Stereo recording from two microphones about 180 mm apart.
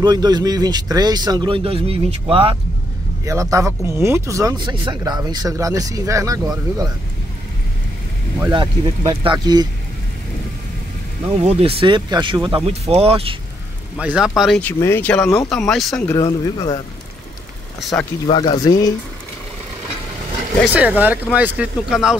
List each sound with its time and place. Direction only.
0.0 s speech: 25° right (ahead or behind)
3.3 s speech: 15° right (ahead or behind)
8.5 s speech: 25° right (ahead or behind)
11.3 s speech: 30° right (ahead or behind)
13.9 s speech: 5° right (ahead or behind)
14.6 s speech: 10° left (ahead or behind)
16.1 s speech: 15° left (ahead or behind)
17.7 s speech: centre (ahead or behind)
18.2 s speech: 25° left (ahead or behind)
20.7 s speech: 10° right (ahead or behind)